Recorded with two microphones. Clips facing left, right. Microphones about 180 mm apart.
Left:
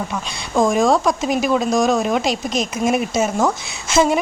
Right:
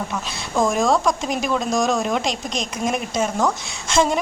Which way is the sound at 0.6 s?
Centre (ahead or behind).